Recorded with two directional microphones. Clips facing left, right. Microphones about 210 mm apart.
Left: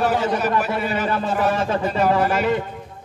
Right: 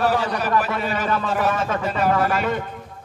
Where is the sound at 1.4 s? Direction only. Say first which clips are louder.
Left 2 dB; 35° left (ahead or behind).